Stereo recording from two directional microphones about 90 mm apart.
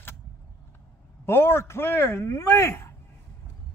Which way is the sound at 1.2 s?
30° left (ahead or behind).